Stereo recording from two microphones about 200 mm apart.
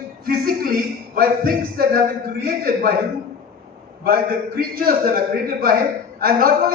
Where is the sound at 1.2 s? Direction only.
45° right (ahead or behind).